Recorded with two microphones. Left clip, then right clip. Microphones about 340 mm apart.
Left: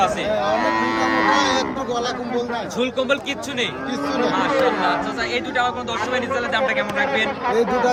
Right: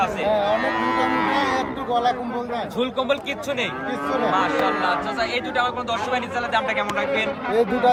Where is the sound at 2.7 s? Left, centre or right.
Centre.